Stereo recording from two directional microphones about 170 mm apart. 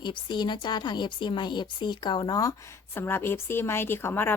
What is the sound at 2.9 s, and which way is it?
A woman's voice, 15° left (ahead or behind).